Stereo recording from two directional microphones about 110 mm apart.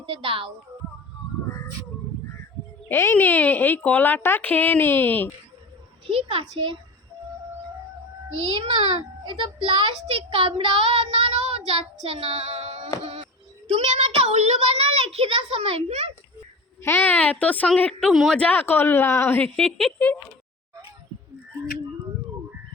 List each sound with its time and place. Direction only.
0.0 s a child's voice: 55° right (ahead or behind)
2.9 s speech: 20° left (ahead or behind)
6.1 s child singing: 60° right (ahead or behind)
8.5 s a child's voice: 45° right (ahead or behind)
10.0 s child singing: 65° right (ahead or behind)
13.7 s a child's voice: 75° right (ahead or behind)
16.8 s speech: 20° left (ahead or behind)
18.1 s a woman's voice: centre (ahead or behind)
18.3 s speech: 15° left (ahead or behind)
19.5 s a woman's voice: centre (ahead or behind)